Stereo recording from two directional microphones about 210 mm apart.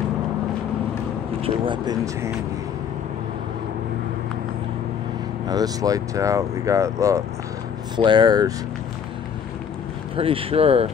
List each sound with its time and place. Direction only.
1.4 s speech: 20° right (ahead or behind)
5.5 s speech: 15° right (ahead or behind)
10.1 s speech: 25° right (ahead or behind)